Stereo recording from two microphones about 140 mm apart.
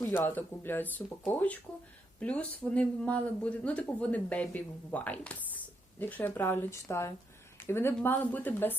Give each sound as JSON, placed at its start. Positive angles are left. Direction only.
{"t": 0.0, "sound": "speech", "side_deg": 15}